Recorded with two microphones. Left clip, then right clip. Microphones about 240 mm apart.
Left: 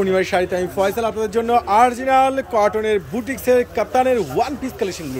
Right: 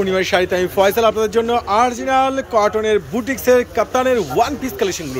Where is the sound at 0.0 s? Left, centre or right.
Centre.